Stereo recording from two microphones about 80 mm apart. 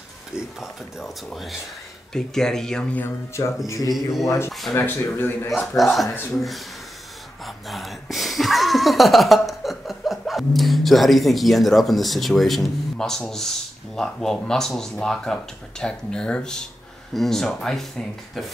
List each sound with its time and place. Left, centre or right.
0.6 s speech: centre
3.6 s a man's voice: left
3.9 s speech: centre
4.7 s speech: left
5.8 s speech: centre